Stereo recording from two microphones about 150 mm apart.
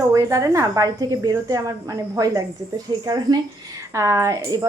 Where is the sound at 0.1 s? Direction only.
20° right (ahead or behind).